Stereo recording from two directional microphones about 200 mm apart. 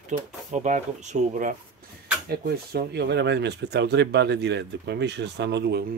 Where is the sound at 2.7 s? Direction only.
55° right (ahead or behind).